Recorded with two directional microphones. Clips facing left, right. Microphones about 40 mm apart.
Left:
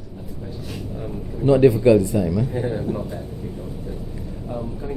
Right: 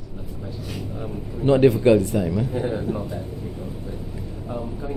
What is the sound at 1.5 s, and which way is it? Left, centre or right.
Speech, right.